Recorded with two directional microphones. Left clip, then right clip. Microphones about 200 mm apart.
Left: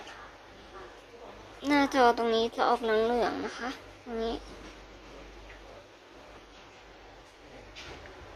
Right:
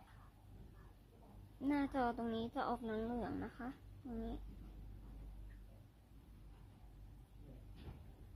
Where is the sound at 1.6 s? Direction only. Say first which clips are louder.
Left 15 dB; 5° left (ahead or behind).